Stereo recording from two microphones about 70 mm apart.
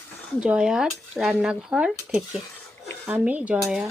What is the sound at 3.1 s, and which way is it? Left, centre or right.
Cutlery, right.